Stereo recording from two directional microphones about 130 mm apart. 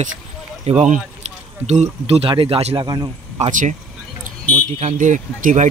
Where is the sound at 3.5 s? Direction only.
80° right.